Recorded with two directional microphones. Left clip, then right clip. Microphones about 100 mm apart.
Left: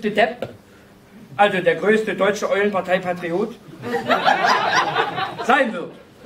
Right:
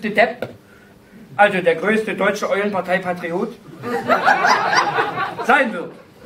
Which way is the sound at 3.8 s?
25° left (ahead or behind).